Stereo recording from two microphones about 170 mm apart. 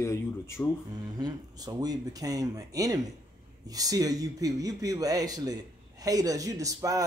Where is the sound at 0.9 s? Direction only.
25° right (ahead or behind).